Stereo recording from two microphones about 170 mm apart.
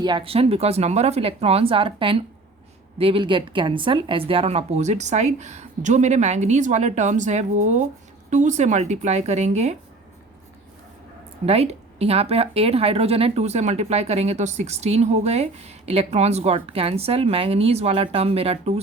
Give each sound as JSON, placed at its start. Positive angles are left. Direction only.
{"t": 0.0, "sound": "a woman's voice", "side_deg": -30}
{"t": 11.4, "sound": "speech", "side_deg": -35}